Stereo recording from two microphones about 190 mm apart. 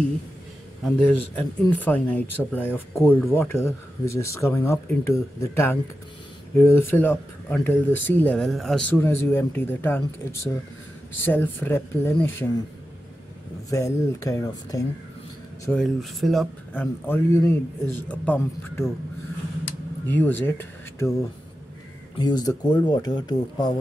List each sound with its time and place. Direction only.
0.8 s speech: 5° left (ahead or behind)
13.7 s speech: 15° left (ahead or behind)
15.7 s speech: centre (ahead or behind)
19.6 s a sound: 10° left (ahead or behind)
22.2 s speech: 20° left (ahead or behind)